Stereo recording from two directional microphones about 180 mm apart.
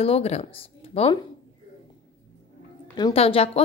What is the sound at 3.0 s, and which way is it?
Speech, 30° left (ahead or behind).